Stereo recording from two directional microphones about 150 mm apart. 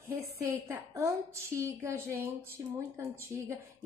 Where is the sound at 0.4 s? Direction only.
20° right (ahead or behind).